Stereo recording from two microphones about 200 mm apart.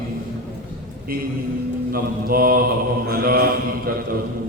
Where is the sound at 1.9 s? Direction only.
50° right (ahead or behind).